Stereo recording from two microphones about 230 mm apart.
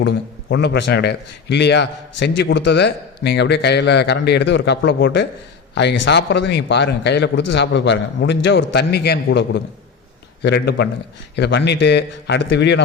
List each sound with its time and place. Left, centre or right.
0.0 s a man's voice: left